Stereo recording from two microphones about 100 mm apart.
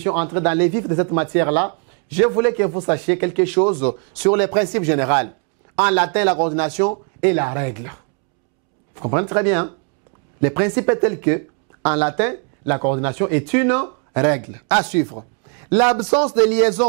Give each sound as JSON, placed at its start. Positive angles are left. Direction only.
{"t": 0.0, "sound": "speech", "side_deg": -10}
{"t": 3.5, "sound": "speech", "side_deg": -25}
{"t": 6.3, "sound": "speech", "side_deg": -25}
{"t": 9.0, "sound": "speech", "side_deg": -20}
{"t": 15.7, "sound": "a man's voice", "side_deg": -5}
{"t": 16.0, "sound": "speech", "side_deg": -30}